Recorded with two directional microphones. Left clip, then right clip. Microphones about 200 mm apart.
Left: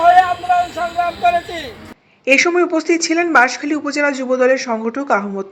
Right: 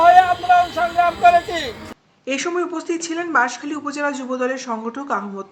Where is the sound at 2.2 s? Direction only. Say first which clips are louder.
Left 10 dB; 20° left (ahead or behind).